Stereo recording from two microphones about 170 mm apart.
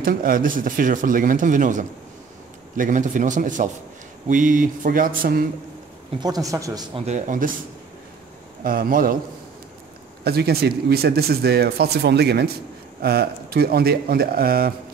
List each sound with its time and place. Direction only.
0.0 s speech: 55° right (ahead or behind)
6.2 s a man's voice: 20° right (ahead or behind)
7.1 s speech: 45° right (ahead or behind)
8.6 s speech: 55° right (ahead or behind)
10.2 s speech: 65° right (ahead or behind)